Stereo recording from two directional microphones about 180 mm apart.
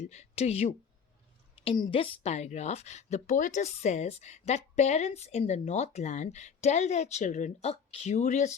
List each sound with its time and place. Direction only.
0.0 s speech: 40° left (ahead or behind)